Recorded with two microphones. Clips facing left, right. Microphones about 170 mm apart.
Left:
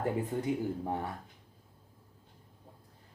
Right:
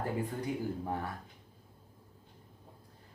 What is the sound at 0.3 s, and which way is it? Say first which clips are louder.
Speech: left 3 dB; 20° left (ahead or behind).